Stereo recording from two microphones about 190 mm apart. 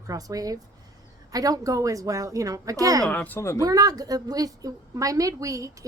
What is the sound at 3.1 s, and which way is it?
Speech, 10° left (ahead or behind).